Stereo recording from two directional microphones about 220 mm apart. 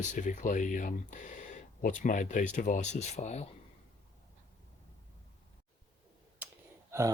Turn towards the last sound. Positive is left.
turn(degrees=-10)  # may be behind; listen again after turning